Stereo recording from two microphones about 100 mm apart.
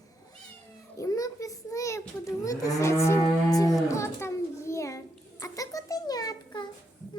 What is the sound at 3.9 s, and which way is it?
A child's voice, 25° left (ahead or behind).